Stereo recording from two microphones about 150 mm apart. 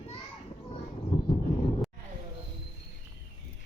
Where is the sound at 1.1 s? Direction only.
35° left (ahead or behind).